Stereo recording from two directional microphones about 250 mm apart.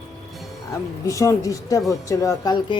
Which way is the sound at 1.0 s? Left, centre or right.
Centre.